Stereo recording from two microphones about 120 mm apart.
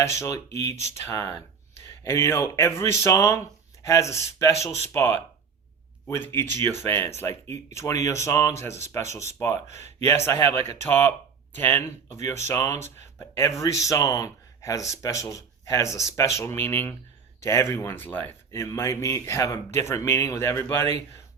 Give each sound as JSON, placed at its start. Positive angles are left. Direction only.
{"t": 0.2, "sound": "speech", "side_deg": 25}